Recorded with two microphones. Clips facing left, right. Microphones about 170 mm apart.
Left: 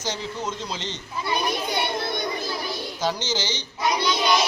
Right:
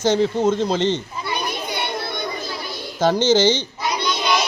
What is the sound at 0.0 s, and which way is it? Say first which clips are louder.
Speech: right 12 dB; 55° right (ahead or behind).